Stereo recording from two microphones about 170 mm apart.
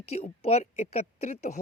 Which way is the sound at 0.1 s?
40° left (ahead or behind).